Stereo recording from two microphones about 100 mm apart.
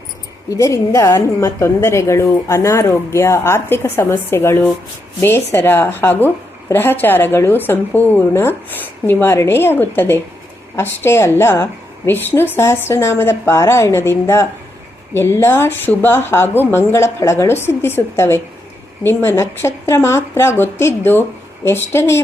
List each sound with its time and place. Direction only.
0.5 s a woman's voice: 35° left (ahead or behind)